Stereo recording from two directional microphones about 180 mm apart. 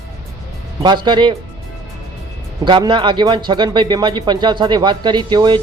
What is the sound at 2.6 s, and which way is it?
Speech, 25° right (ahead or behind).